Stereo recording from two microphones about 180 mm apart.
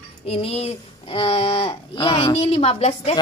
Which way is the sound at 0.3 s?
35° left (ahead or behind).